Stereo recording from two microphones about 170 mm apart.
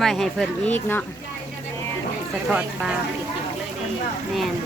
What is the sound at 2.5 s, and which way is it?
Speech, 5° right (ahead or behind).